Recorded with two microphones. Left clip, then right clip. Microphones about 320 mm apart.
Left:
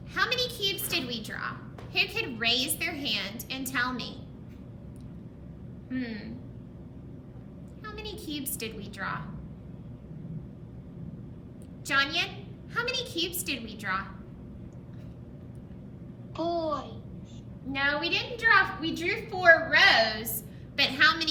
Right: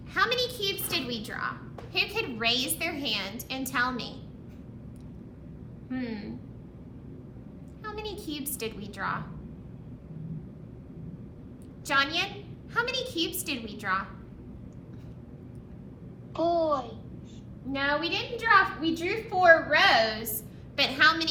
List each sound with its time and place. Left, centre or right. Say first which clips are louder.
0.1 s a woman's voice: right 2 dB; centre
5.9 s a child's voice: even; centre
7.9 s a child's voice: right 2 dB; centre
11.9 s a child's voice: even; centre
16.3 s a child's voice: right 4 dB; centre
17.7 s a child's voice: even; centre